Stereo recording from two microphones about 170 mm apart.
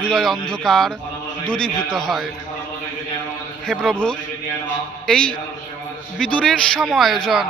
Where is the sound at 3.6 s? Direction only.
Centre (ahead or behind).